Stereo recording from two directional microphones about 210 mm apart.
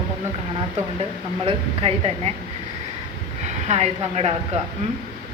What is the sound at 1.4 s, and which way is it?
Speech, 25° right (ahead or behind).